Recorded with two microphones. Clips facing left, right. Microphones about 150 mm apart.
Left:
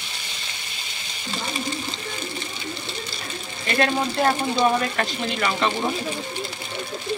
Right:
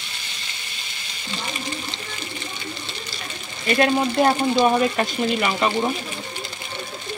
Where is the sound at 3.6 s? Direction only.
20° right (ahead or behind).